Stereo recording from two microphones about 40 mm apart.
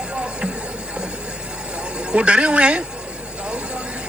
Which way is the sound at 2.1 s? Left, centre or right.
Right.